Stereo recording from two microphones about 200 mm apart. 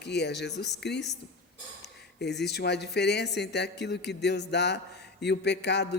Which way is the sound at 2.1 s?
55° left (ahead or behind).